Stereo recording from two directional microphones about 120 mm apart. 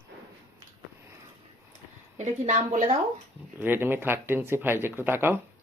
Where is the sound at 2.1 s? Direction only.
75° right (ahead or behind).